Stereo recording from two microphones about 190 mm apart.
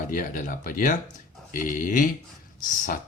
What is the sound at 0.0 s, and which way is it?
Speech, 45° left (ahead or behind).